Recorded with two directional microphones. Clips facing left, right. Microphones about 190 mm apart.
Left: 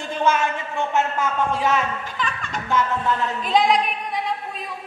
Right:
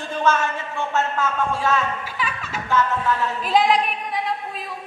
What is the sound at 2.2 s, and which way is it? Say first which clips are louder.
Music: left 1 dB; 5° right (ahead or behind).